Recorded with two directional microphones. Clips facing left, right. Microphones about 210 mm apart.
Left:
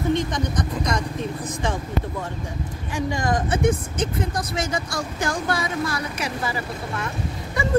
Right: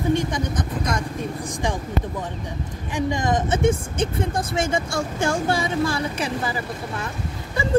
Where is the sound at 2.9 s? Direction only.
20° right (ahead or behind).